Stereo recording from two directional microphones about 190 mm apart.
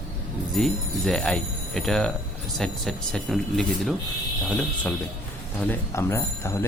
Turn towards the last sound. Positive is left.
turn(degrees=15)  # may be behind; listen again after turning